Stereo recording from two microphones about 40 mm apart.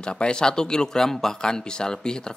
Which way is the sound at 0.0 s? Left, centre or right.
Left.